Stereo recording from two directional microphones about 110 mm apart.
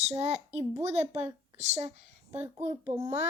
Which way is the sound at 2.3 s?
20° right (ahead or behind).